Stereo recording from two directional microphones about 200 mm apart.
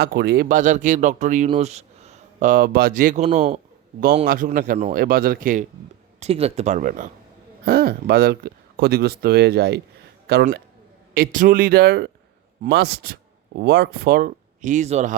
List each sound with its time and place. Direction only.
0.0 s speech: 50° right (ahead or behind)
6.1 s speech: 30° right (ahead or behind)